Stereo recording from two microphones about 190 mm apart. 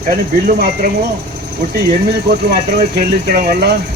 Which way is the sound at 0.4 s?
50° right (ahead or behind).